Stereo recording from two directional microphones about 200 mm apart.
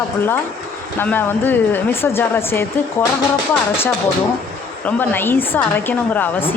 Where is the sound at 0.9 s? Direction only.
10° left (ahead or behind).